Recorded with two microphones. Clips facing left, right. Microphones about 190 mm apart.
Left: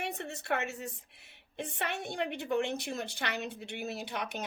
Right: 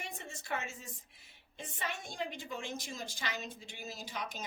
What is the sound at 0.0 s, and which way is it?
Speech, 65° left (ahead or behind).